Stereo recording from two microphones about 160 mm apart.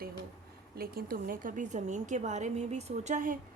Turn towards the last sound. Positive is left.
turn(degrees=-55)  # may be behind; listen again after turning